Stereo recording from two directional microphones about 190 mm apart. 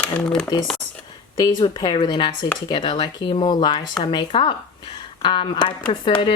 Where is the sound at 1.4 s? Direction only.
25° left (ahead or behind).